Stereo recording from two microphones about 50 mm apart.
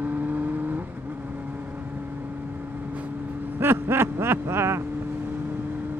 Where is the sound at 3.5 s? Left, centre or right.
Right.